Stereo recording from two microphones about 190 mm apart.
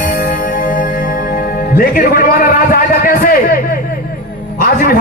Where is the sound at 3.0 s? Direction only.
50° left (ahead or behind).